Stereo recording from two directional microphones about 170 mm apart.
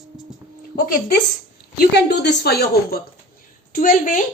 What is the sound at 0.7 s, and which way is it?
A woman's voice, 80° left.